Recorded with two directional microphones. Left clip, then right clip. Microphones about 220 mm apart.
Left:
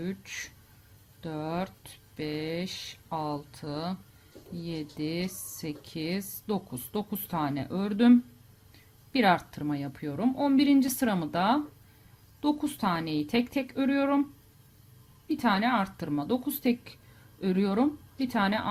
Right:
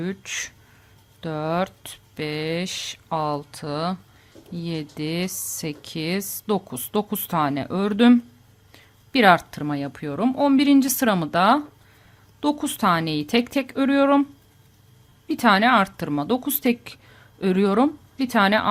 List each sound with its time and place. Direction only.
0.0 s speech: 30° right (ahead or behind)
15.3 s speech: 30° right (ahead or behind)